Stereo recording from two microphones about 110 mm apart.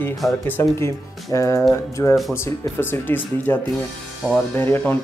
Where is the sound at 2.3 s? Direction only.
20° left (ahead or behind).